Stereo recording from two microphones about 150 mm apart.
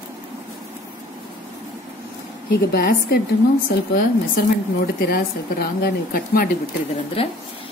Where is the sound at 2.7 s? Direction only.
80° left.